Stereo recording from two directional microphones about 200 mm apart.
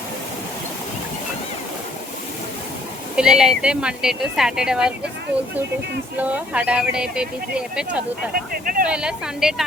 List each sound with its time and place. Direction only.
3.2 s speech: 5° right (ahead or behind)
6.1 s speech: 5° right (ahead or behind)
8.6 s speech: 45° right (ahead or behind)
8.9 s speech: 5° right (ahead or behind)